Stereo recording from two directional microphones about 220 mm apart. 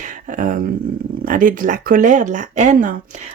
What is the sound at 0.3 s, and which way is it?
Speech, 35° right (ahead or behind).